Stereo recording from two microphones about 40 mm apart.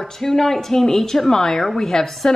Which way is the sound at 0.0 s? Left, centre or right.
Centre.